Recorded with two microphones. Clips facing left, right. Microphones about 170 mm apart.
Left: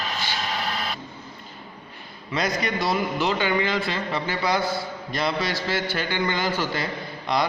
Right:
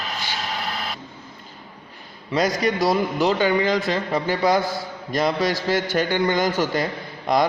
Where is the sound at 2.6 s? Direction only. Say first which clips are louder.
Right 5 dB; 40° right (ahead or behind).